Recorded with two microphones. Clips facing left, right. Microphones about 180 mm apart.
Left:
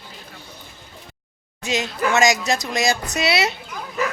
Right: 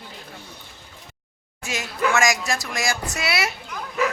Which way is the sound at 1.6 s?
20° left (ahead or behind).